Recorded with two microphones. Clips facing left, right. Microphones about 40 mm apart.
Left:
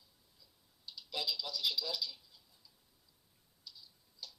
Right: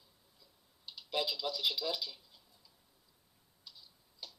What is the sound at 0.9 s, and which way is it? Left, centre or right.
Speech, right.